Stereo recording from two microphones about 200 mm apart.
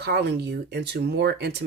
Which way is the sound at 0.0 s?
55° right (ahead or behind).